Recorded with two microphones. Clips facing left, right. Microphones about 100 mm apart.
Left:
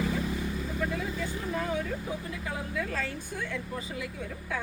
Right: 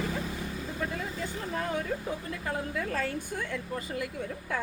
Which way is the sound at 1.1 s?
45° right (ahead or behind).